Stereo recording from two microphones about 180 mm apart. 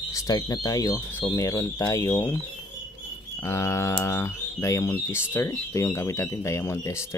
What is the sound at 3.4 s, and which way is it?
Speech, 15° left (ahead or behind).